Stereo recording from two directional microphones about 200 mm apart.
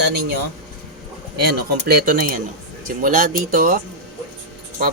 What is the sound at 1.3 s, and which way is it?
Speech, 50° right (ahead or behind).